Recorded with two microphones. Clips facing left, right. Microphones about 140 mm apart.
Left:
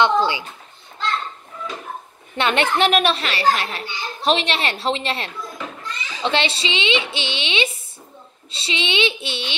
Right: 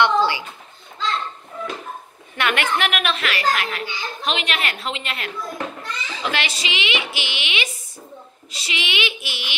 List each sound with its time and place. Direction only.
0.0 s a woman's voice: 20° left (ahead or behind)
2.3 s a child's voice: 25° left (ahead or behind)